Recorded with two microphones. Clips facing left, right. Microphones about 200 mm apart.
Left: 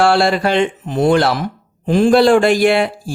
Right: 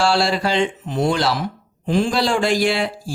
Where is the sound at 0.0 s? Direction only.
55° left (ahead or behind).